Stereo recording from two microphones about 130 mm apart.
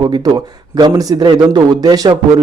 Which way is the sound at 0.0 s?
35° right (ahead or behind).